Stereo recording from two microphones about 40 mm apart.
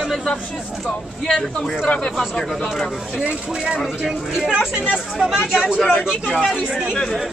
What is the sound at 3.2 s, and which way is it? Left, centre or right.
Speech, right.